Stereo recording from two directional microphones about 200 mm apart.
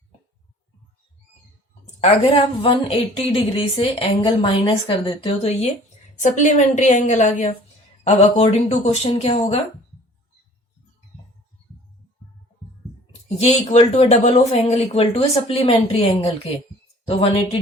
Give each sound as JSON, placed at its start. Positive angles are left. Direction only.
{"t": 2.0, "sound": "speech", "side_deg": 30}
{"t": 13.2, "sound": "speech", "side_deg": 30}